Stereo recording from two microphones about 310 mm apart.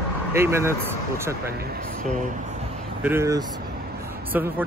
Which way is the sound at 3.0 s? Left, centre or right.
Centre.